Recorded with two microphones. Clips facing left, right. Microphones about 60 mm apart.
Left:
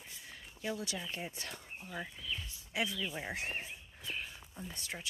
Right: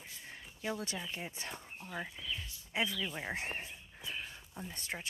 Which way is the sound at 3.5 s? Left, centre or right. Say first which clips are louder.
Left 1 dB; right.